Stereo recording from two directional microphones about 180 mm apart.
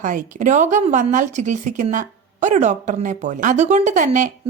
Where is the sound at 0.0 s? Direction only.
45° right (ahead or behind).